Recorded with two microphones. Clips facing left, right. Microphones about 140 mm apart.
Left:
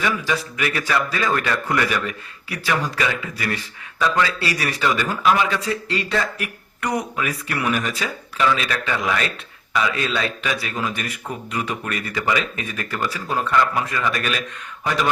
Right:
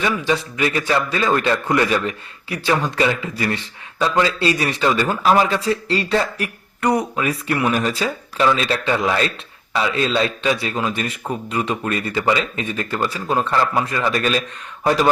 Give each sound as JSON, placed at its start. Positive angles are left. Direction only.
{"t": 0.0, "sound": "a man's voice", "side_deg": -25}